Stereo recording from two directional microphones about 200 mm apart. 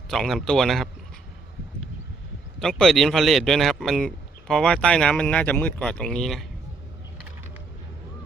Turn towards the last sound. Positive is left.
turn(degrees=0)  # may be behind; listen again after turning